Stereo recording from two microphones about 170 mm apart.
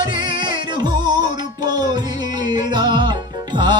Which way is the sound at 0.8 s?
25° right (ahead or behind).